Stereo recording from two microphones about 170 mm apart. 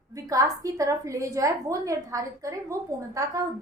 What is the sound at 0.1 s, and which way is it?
A woman's voice, 20° right (ahead or behind).